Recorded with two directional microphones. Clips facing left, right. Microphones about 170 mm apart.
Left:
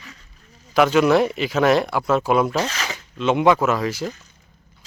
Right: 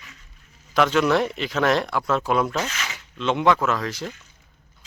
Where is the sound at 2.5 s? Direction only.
35° left (ahead or behind).